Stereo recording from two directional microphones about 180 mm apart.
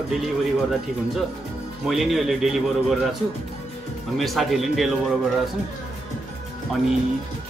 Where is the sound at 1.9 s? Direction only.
Centre (ahead or behind).